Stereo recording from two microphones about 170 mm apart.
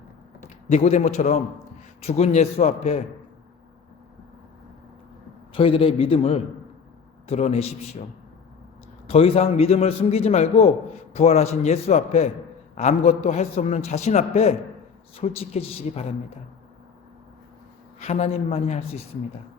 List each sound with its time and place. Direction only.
0.7 s a man's voice: 40° left (ahead or behind)
5.5 s a man's voice: 30° left (ahead or behind)
9.0 s a man's voice: 35° left (ahead or behind)
18.0 s a man's voice: 40° left (ahead or behind)